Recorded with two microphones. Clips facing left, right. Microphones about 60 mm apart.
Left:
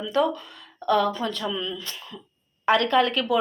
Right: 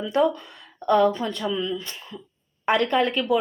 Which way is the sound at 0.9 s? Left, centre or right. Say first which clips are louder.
Right 3 dB; right.